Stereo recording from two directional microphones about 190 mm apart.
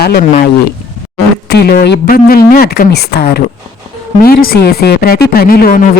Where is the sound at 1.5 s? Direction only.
55° left (ahead or behind).